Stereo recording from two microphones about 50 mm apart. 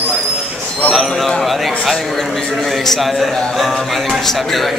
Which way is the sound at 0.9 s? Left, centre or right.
Centre.